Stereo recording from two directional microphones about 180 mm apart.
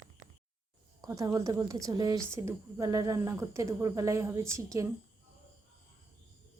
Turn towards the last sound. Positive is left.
turn(degrees=-15)  # may be behind; listen again after turning